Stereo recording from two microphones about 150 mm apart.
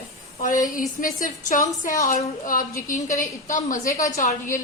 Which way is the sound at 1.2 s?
60° left (ahead or behind).